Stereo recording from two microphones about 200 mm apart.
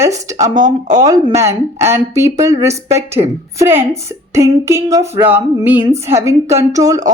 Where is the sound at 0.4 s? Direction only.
20° right (ahead or behind).